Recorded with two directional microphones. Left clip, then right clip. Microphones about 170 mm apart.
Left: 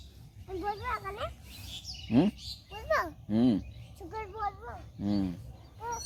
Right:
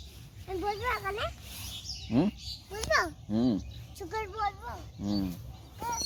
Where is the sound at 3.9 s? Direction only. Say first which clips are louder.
Right 4 dB; 5° right (ahead or behind).